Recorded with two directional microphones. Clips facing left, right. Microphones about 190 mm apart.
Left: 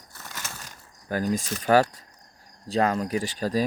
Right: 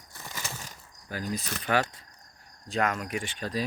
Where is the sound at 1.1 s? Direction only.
50° left (ahead or behind).